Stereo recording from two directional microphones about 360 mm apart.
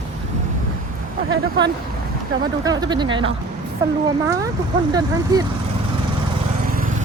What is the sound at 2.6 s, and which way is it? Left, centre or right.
Speech, centre.